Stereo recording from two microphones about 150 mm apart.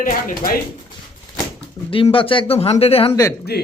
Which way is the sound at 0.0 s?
65° left (ahead or behind).